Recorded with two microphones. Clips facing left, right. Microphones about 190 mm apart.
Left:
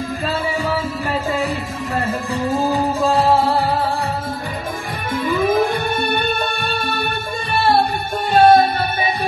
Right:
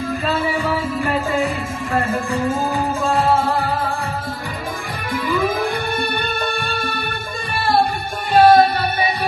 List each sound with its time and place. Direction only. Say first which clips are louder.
2.4 s music: left 6 dB; 35° left (ahead or behind)
5.1 s music: left 1 dB; 25° left (ahead or behind)
8.3 s music: even; 25° left (ahead or behind)